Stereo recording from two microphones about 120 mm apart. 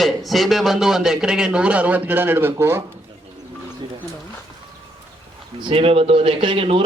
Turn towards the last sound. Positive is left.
turn(degrees=-50)  # may be behind; listen again after turning